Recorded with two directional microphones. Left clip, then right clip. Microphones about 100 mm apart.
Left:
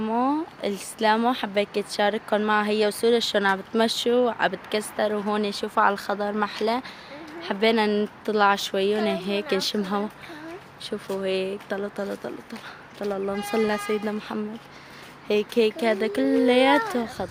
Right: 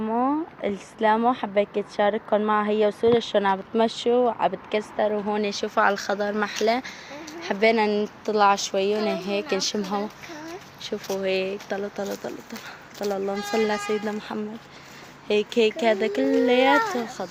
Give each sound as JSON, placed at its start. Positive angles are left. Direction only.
{"t": 0.0, "sound": "a sound", "side_deg": 30}
{"t": 1.1, "sound": "speech", "side_deg": 30}
{"t": 4.2, "sound": "speech", "side_deg": 45}
{"t": 4.7, "sound": "speech", "side_deg": 25}
{"t": 5.1, "sound": "speech", "side_deg": 40}
{"t": 5.4, "sound": "a woman's voice", "side_deg": 20}
{"t": 7.4, "sound": "a woman's voice", "side_deg": 10}
{"t": 7.9, "sound": "speech", "side_deg": 30}
{"t": 11.1, "sound": "a woman's voice", "side_deg": 15}
{"t": 13.1, "sound": "speech", "side_deg": 5}
{"t": 13.4, "sound": "a woman's voice", "side_deg": 20}
{"t": 16.5, "sound": "speech", "side_deg": 40}
{"t": 17.2, "sound": "speech", "side_deg": 30}